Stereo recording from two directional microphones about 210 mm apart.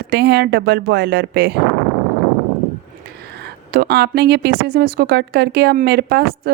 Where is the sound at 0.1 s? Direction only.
50° right (ahead or behind).